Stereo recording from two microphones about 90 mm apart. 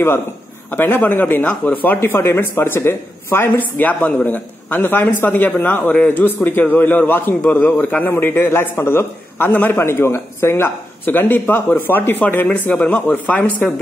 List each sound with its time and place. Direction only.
0.7 s speech: 20° left (ahead or behind)